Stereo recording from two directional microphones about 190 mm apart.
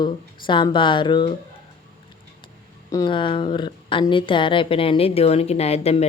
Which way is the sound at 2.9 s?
25° left (ahead or behind).